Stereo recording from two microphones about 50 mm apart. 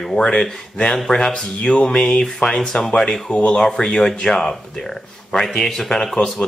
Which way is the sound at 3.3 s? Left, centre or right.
Left.